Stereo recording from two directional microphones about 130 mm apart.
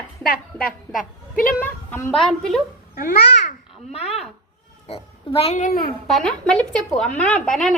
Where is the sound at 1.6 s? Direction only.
20° left (ahead or behind).